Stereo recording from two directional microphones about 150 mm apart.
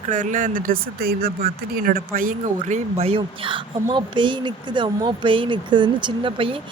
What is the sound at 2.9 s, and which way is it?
Speech, 40° right (ahead or behind).